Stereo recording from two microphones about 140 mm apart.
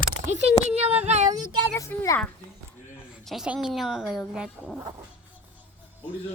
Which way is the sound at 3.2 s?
5° right (ahead or behind).